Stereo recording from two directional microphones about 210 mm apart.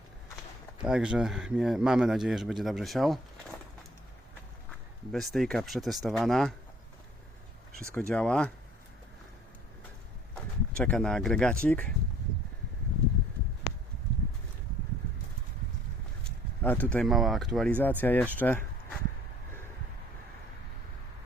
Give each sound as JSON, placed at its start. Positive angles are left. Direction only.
{"t": 0.8, "sound": "speech", "side_deg": -5}
{"t": 5.1, "sound": "speech", "side_deg": 0}
{"t": 7.9, "sound": "speech", "side_deg": 5}
{"t": 10.8, "sound": "speech", "side_deg": 5}
{"t": 16.6, "sound": "speech", "side_deg": 10}